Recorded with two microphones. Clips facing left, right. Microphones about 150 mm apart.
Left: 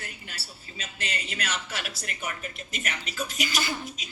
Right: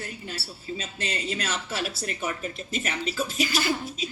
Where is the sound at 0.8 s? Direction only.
25° right (ahead or behind).